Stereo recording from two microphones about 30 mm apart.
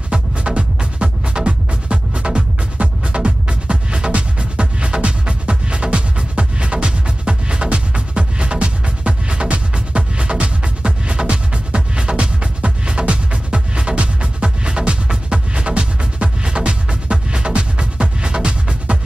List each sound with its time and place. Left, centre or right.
0.1 s music: right